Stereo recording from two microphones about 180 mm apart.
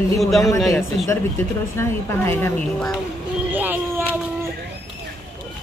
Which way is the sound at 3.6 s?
10° right (ahead or behind).